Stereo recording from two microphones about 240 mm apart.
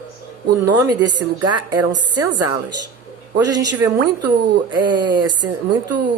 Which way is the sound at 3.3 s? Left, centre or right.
Centre.